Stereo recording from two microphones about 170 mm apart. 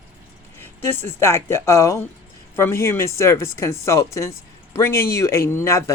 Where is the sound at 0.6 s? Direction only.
10° left (ahead or behind).